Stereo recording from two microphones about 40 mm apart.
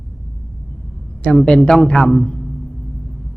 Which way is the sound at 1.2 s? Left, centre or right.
Left.